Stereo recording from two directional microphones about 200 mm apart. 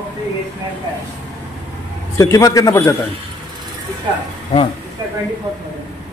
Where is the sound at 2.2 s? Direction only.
15° left (ahead or behind).